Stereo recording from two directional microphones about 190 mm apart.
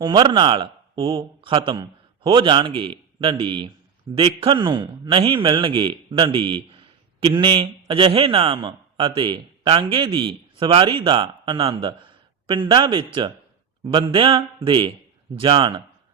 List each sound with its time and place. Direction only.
0.0 s a man's voice: 25° right (ahead or behind)